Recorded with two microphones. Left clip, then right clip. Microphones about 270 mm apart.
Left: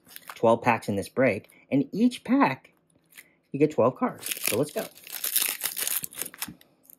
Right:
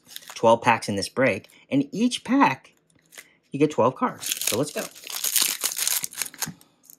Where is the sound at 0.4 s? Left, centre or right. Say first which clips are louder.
Right 4 dB; centre.